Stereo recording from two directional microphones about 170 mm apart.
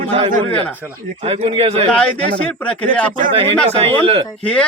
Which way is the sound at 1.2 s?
35° right (ahead or behind).